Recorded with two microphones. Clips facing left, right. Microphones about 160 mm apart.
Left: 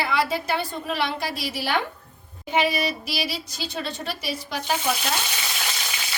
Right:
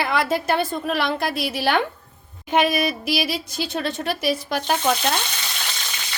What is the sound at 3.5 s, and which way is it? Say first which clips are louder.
A woman's voice: right 7 dB; 60° right (ahead or behind).